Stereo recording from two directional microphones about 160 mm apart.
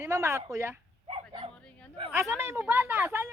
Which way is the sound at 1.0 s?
35° right (ahead or behind).